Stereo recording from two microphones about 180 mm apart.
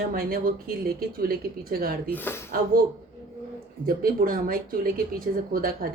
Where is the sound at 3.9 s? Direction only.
50° right (ahead or behind).